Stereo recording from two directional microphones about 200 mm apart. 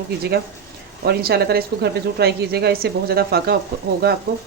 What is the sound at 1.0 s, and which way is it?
Speech, 50° right (ahead or behind).